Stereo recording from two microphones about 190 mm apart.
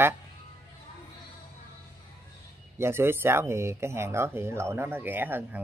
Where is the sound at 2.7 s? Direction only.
15° right (ahead or behind).